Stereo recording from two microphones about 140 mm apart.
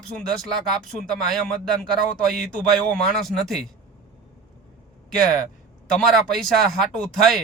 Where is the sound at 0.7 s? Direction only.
5° left (ahead or behind).